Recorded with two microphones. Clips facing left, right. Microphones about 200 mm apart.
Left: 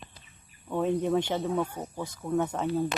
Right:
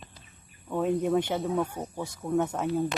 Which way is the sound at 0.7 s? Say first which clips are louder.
Right 1 dB; 5° right (ahead or behind).